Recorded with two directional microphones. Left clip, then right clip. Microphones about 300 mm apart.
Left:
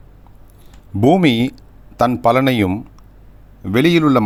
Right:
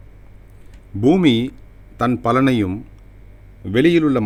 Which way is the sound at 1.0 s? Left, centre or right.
Left.